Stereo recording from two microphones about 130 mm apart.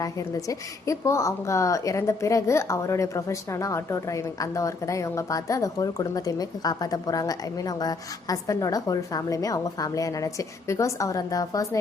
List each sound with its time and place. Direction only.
0.0 s a woman's voice: 25° left (ahead or behind)